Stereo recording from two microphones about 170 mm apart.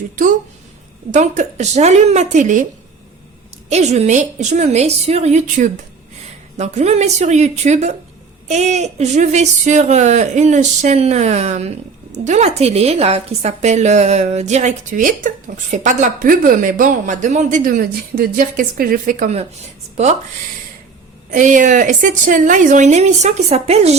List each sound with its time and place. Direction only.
1.1 s speech: 45° right (ahead or behind)
3.7 s a woman's voice: 40° right (ahead or behind)
21.2 s speech: 50° right (ahead or behind)